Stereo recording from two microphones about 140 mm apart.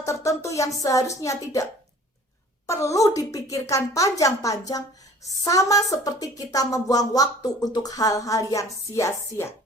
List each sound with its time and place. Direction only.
0.0 s a woman's voice: 20° left (ahead or behind)
2.6 s a woman's voice: 20° left (ahead or behind)